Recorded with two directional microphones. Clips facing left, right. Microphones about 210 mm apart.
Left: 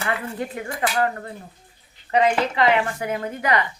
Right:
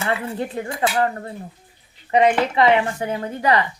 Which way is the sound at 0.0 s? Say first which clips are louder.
Right 3 dB; 30° right (ahead or behind).